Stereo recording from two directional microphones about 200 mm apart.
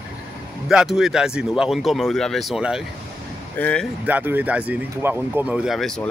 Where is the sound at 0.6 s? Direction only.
Centre (ahead or behind).